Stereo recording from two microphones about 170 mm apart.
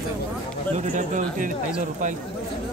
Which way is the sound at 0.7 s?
45° right (ahead or behind).